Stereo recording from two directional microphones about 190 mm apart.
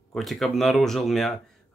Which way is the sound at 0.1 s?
Centre (ahead or behind).